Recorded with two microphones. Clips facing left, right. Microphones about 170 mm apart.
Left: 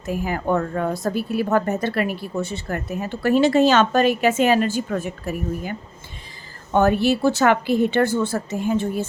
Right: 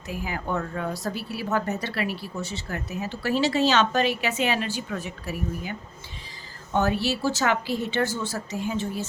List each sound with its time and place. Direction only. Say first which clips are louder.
0.1 s speech: left 7 dB; 50° left (ahead or behind)
6.7 s a woman's voice: left 7 dB; 55° left (ahead or behind)